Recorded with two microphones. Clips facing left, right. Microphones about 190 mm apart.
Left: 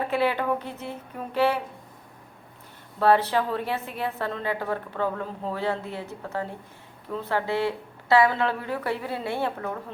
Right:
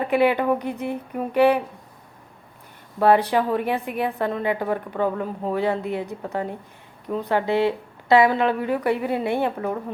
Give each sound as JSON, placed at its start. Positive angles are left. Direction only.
{"t": 0.1, "sound": "a woman's voice", "side_deg": -15}
{"t": 3.0, "sound": "a woman's voice", "side_deg": -15}